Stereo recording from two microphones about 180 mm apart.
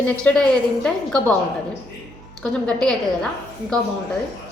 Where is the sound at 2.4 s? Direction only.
5° left (ahead or behind).